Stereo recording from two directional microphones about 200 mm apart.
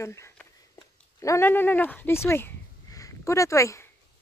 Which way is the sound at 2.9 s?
15° left (ahead or behind).